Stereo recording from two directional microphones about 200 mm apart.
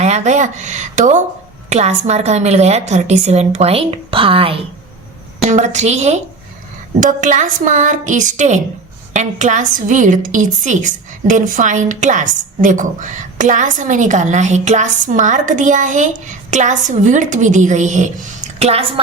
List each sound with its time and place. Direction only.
0.0 s a woman's voice: 35° right (ahead or behind)